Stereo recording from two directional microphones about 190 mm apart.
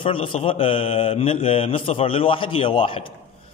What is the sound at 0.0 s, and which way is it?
A man's voice, 30° left (ahead or behind).